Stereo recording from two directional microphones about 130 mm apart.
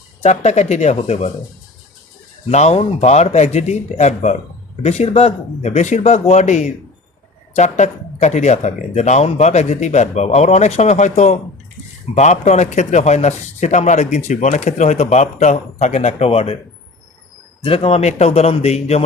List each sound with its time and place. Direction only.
0.2 s speech: 60° left (ahead or behind)
2.5 s speech: 60° left (ahead or behind)
17.6 s a man's voice: 50° left (ahead or behind)